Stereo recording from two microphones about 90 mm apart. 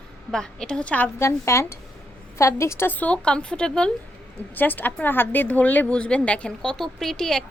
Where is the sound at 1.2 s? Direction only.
30° left (ahead or behind); by 3.9 s 10° left (ahead or behind).